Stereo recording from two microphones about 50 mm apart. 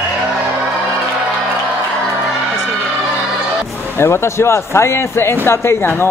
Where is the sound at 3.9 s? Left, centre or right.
Left.